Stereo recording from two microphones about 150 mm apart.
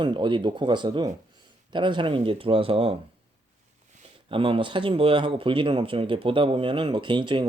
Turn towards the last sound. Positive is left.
turn(degrees=-30)  # may be behind; listen again after turning